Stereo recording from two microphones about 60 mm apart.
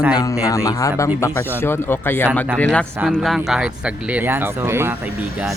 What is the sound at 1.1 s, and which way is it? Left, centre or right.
Speech, left.